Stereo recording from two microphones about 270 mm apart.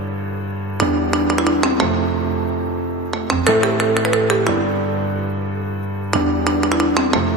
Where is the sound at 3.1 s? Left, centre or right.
Centre.